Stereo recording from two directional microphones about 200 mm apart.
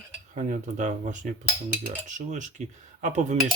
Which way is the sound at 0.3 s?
40° right (ahead or behind).